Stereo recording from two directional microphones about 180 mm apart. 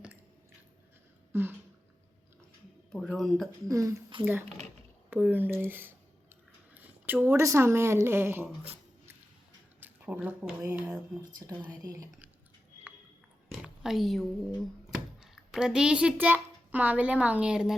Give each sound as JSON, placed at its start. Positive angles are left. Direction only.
{"t": 1.3, "sound": "a sound", "side_deg": -10}
{"t": 2.9, "sound": "speech", "side_deg": 0}
{"t": 3.7, "sound": "speech", "side_deg": -15}
{"t": 9.8, "sound": "speech", "side_deg": -10}
{"t": 11.2, "sound": "speech", "side_deg": -20}
{"t": 13.5, "sound": "a sound", "side_deg": 0}
{"t": 14.8, "sound": "a child's voice", "side_deg": -5}